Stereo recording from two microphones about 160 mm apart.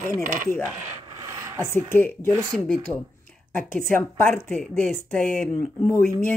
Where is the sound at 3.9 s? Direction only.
15° left (ahead or behind).